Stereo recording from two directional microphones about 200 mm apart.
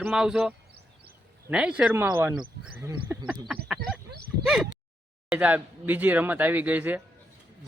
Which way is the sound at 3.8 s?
55° right (ahead or behind).